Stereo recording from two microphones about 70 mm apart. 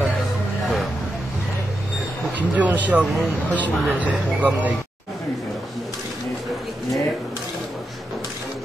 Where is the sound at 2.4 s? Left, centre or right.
Right.